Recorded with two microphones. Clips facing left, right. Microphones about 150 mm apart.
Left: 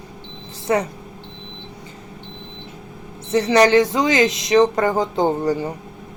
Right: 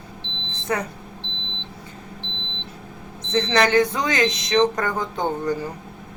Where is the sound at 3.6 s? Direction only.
25° left (ahead or behind).